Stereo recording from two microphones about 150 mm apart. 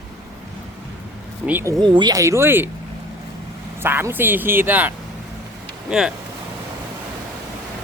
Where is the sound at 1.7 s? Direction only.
30° right (ahead or behind); by 2.7 s 15° right (ahead or behind).